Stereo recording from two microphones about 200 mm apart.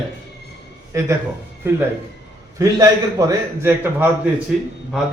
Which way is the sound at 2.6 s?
15° right (ahead or behind).